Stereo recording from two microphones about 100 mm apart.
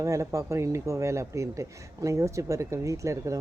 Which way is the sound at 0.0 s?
30° right (ahead or behind).